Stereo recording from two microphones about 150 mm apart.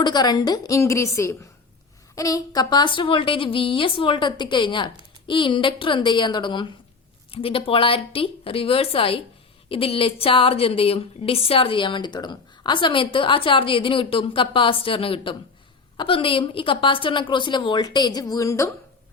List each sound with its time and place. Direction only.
0.0 s a woman's voice: 25° left (ahead or behind)